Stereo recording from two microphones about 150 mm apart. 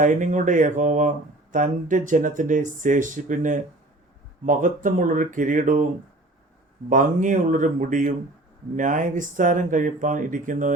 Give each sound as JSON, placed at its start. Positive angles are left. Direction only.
{"t": 0.0, "sound": "speech", "side_deg": -60}
{"t": 6.9, "sound": "speech", "side_deg": -60}